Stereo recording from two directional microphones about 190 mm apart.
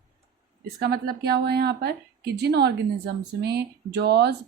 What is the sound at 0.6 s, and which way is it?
Speech, 55° right (ahead or behind).